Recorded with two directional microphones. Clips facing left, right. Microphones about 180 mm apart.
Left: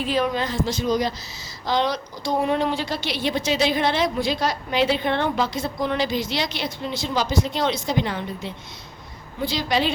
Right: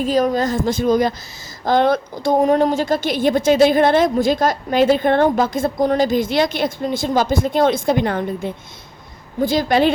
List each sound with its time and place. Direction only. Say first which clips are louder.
0.0 s a woman's voice: right 6 dB; 40° right (ahead or behind)